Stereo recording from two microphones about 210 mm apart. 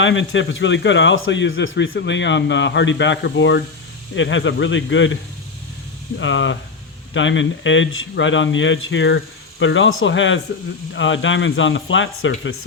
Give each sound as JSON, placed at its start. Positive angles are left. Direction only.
{"t": 0.0, "sound": "speech", "side_deg": 65}
{"t": 6.1, "sound": "speech", "side_deg": 60}